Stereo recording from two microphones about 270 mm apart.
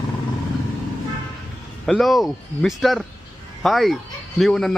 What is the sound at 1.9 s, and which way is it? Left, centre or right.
A man's voice, centre.